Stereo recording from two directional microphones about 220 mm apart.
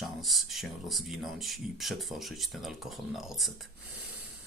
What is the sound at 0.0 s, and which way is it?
Speech, centre (ahead or behind).